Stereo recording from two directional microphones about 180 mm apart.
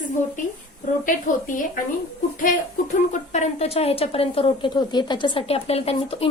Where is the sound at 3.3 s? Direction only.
35° left (ahead or behind).